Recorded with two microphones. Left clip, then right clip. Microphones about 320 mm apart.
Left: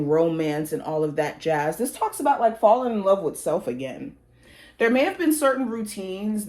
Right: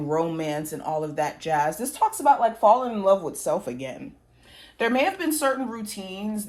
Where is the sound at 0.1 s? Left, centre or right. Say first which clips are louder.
Left 4 dB; right.